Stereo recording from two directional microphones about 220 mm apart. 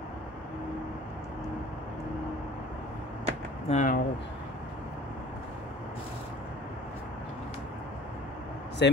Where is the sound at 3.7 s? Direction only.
35° left (ahead or behind).